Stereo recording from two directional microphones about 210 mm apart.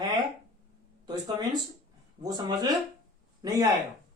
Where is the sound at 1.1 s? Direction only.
20° right (ahead or behind).